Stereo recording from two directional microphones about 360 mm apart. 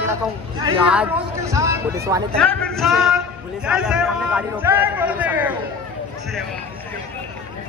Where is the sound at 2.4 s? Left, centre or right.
Centre.